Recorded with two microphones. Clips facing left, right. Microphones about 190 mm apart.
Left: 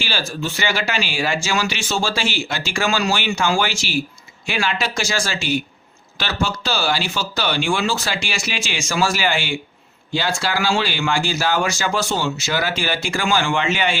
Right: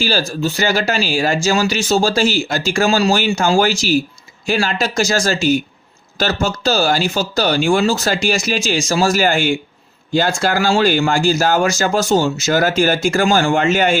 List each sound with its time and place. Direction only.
0.0 s speech: 40° right (ahead or behind)